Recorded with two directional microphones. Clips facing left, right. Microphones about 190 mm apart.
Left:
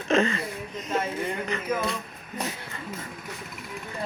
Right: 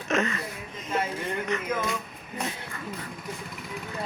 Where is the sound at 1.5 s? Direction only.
30° left (ahead or behind).